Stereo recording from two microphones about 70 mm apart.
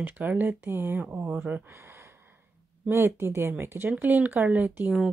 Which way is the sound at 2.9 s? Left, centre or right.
Right.